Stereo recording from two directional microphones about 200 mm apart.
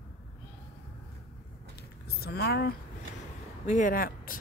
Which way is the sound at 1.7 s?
55° left (ahead or behind).